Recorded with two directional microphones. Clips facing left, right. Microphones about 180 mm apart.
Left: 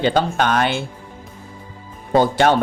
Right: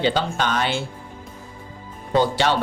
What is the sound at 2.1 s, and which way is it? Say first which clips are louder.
Speech: left 4 dB; 50° left (ahead or behind).